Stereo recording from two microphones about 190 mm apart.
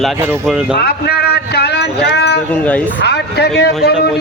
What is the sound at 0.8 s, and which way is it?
Speech, 55° left (ahead or behind).